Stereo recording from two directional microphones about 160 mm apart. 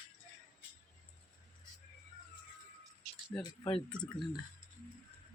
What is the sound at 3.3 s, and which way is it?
Speech, 10° left (ahead or behind).